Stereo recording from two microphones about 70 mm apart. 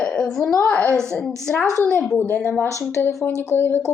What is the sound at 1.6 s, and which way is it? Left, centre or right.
Speech, right.